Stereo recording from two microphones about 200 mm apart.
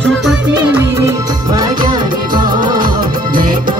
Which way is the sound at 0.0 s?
Centre (ahead or behind).